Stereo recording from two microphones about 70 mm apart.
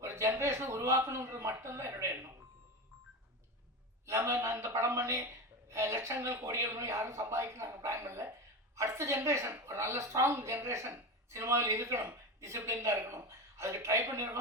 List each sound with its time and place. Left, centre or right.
0.0 s speech: right
4.0 s a man's voice: right